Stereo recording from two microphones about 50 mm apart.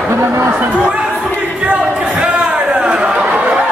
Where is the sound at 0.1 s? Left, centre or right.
Right.